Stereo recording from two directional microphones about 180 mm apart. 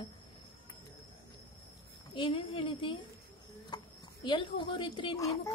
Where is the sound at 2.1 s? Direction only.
30° left (ahead or behind).